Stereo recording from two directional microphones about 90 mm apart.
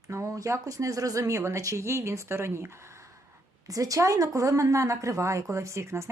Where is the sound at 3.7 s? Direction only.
40° right (ahead or behind).